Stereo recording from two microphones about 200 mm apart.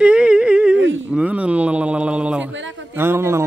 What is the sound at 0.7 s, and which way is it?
Speech, 70° right (ahead or behind).